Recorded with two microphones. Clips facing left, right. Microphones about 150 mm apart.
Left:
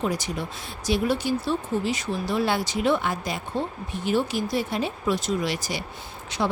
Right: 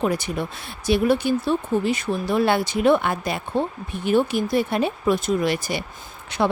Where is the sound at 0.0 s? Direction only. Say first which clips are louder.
Right 4 dB; 60° right (ahead or behind).